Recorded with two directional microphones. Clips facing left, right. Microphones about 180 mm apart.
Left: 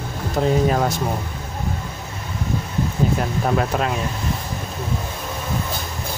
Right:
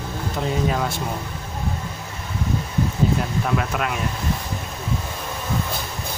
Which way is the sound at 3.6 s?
30° left (ahead or behind).